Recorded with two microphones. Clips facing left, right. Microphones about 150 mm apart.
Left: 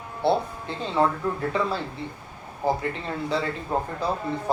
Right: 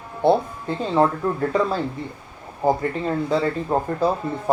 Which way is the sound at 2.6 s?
50° right (ahead or behind).